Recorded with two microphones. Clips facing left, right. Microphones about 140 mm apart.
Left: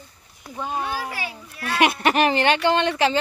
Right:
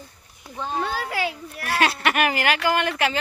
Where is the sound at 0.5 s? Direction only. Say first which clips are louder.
Even; 10° left (ahead or behind).